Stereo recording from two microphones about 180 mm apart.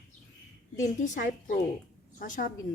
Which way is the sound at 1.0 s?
45° left (ahead or behind).